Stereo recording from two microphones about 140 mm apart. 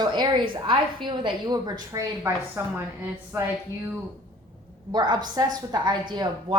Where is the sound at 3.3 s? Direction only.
20° right (ahead or behind).